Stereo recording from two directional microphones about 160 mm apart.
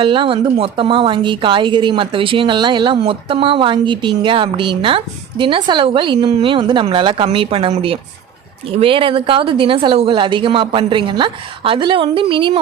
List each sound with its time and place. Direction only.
0.0 s a woman's voice: 30° right (ahead or behind)